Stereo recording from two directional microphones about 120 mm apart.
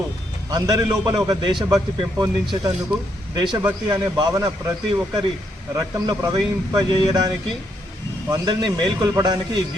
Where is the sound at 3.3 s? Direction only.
40° right (ahead or behind).